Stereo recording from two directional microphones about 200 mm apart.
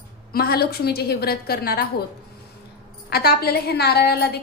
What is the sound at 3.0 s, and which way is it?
A woman's voice, 50° left (ahead or behind).